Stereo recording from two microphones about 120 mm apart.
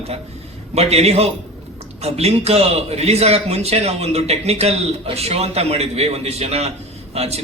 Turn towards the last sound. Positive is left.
turn(degrees=-60)  # may be behind; listen again after turning